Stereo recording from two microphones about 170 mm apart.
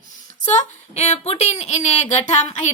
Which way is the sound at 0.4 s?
40° left (ahead or behind).